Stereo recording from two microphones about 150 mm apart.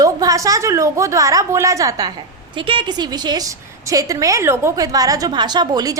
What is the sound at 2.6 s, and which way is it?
A woman's voice, 35° right (ahead or behind).